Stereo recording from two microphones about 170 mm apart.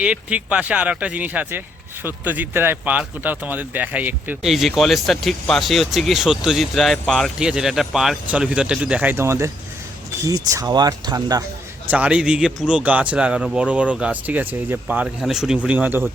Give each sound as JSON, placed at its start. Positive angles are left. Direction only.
{"t": 0.0, "sound": "a man's voice", "side_deg": -5}
{"t": 11.9, "sound": "a man's voice", "side_deg": -5}